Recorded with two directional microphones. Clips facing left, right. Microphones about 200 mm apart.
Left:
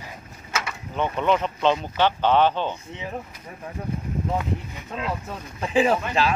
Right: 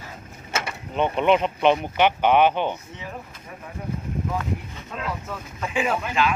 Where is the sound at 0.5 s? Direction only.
25° right (ahead or behind).